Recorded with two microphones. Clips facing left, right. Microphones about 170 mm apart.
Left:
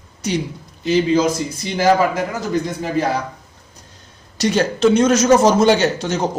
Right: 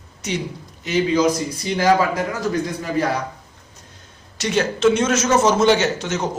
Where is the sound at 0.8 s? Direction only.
30° left (ahead or behind).